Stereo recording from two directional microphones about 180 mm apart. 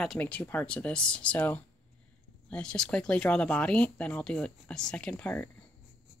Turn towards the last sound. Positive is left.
turn(degrees=5)  # may be behind; listen again after turning